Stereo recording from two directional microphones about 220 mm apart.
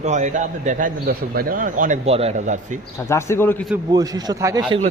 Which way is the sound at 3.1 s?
10° left (ahead or behind).